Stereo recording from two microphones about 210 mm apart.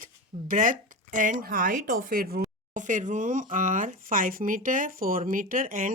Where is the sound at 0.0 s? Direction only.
40° right (ahead or behind).